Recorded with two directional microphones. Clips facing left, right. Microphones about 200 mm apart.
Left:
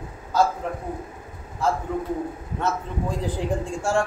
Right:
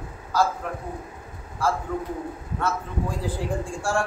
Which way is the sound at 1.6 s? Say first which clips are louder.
Left 1 dB; 20° left (ahead or behind).